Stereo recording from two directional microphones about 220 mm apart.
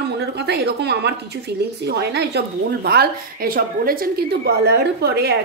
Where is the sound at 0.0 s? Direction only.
50° right (ahead or behind).